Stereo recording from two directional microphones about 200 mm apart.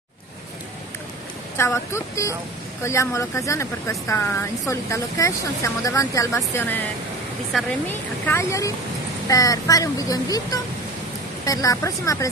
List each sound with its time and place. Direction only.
1.6 s speech: 15° left (ahead or behind)
8.3 s speech: 15° left (ahead or behind)